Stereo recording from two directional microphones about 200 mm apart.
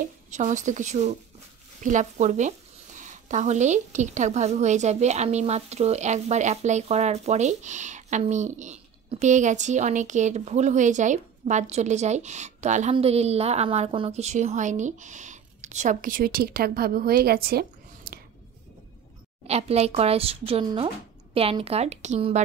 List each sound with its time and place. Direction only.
0.3 s speech: 35° right (ahead or behind)
19.4 s speech: 30° right (ahead or behind)